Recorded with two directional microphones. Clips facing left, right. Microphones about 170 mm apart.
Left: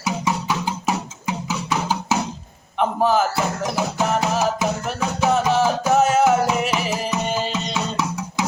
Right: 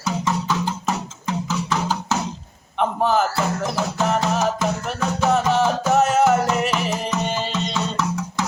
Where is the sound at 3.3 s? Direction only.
10° left (ahead or behind).